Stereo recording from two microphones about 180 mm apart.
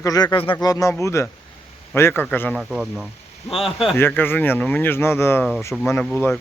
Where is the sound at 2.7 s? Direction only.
5° right (ahead or behind).